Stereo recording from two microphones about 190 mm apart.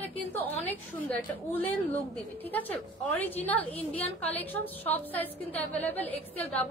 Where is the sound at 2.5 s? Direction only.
10° left (ahead or behind).